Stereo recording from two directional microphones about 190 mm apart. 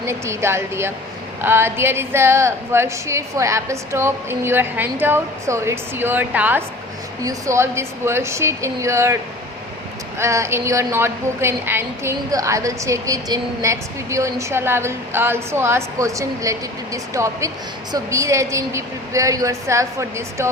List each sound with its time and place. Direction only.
0.0 s a woman's voice: 15° right (ahead or behind)
10.2 s a woman's voice: 15° right (ahead or behind)